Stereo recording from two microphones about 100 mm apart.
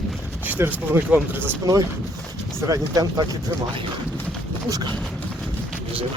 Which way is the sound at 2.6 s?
35° right (ahead or behind).